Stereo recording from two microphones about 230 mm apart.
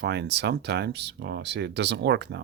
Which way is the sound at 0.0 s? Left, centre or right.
Right.